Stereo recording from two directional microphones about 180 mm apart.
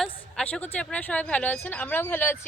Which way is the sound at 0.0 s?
5° left (ahead or behind).